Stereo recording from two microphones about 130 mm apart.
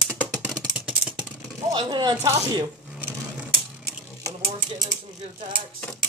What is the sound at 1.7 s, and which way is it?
Speech, 35° right (ahead or behind).